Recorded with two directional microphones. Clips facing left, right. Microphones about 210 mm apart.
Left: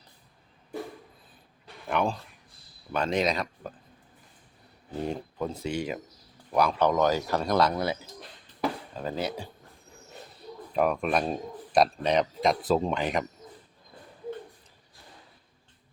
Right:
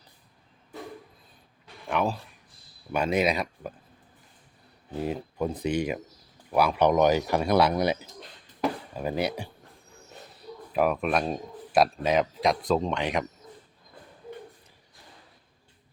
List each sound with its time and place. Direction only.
1.9 s a man's voice: centre (ahead or behind)
4.9 s speech: 5° right (ahead or behind)
5.5 s speech: 15° right (ahead or behind)
10.7 s speech: 5° right (ahead or behind)